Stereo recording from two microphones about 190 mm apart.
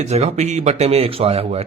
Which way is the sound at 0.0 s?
35° right (ahead or behind).